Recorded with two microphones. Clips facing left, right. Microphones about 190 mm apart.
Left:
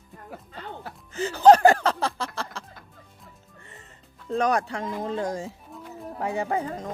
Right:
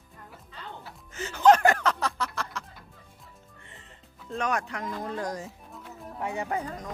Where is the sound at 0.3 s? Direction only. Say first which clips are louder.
Left 6 dB; 50° left (ahead or behind).